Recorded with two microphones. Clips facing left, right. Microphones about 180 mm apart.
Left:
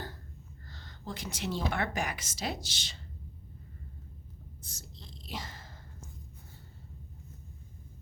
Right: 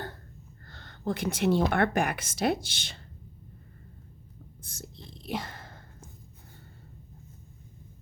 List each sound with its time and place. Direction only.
0.7 s a woman's voice: 60° right (ahead or behind)
4.6 s whispering: 55° right (ahead or behind)